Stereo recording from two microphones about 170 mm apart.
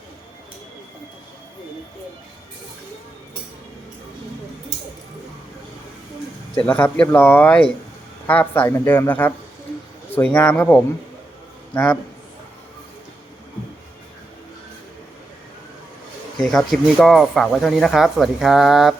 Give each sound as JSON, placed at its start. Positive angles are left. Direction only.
{"t": 6.6, "sound": "a woman's voice", "side_deg": 10}
{"t": 16.5, "sound": "speech", "side_deg": 0}